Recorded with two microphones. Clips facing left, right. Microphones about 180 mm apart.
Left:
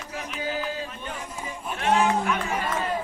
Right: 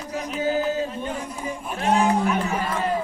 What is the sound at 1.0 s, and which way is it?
Music, 35° right (ahead or behind).